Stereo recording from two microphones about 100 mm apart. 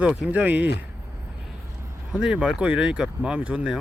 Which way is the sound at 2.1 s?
10° right (ahead or behind).